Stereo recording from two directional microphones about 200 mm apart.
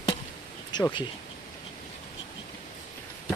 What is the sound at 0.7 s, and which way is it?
Speech, 20° left (ahead or behind).